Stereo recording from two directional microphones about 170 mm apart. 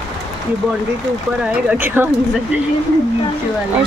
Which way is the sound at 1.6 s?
10° right (ahead or behind).